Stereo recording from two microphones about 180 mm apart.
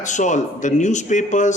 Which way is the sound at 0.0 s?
45° left (ahead or behind).